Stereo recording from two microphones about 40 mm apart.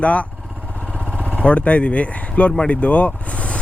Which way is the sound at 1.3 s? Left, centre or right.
Left.